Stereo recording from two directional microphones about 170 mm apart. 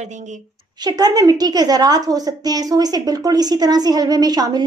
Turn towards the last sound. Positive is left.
turn(degrees=-25)  # may be behind; listen again after turning